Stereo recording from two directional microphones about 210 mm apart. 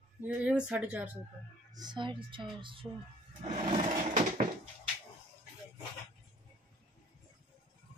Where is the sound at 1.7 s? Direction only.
20° right (ahead or behind).